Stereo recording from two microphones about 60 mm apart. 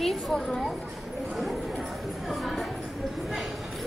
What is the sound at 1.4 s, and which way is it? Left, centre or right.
Clip-clop, centre.